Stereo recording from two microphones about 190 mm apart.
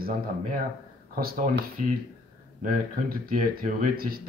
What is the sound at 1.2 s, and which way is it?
Speech, 50° right (ahead or behind).